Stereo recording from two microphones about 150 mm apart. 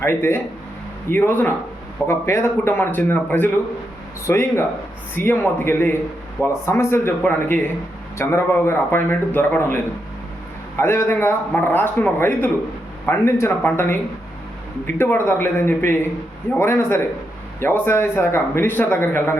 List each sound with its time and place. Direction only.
0.0 s speech: 15° left (ahead or behind)